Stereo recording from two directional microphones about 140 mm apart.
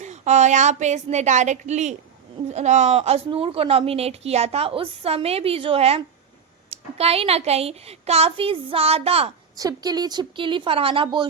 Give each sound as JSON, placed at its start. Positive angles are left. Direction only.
{"t": 0.0, "sound": "a woman's voice", "side_deg": -55}
{"t": 9.6, "sound": "speech", "side_deg": -25}